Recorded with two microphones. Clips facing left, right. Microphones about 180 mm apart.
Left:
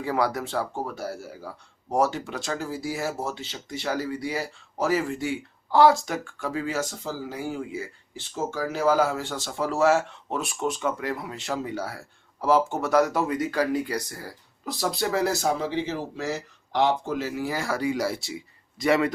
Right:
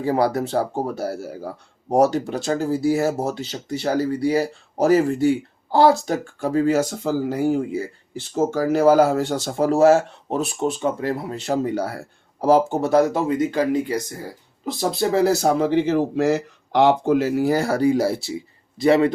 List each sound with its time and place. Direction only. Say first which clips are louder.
0.0 s speech: right 6 dB; 35° right (ahead or behind)
1.2 s speech: right 8 dB; 55° right (ahead or behind)
7.0 s speech: right 11 dB; 60° right (ahead or behind); by 15.4 s 30° right (ahead or behind)
15.4 s speech: right 8 dB; 50° right (ahead or behind); by 19.1 s 30° right (ahead or behind)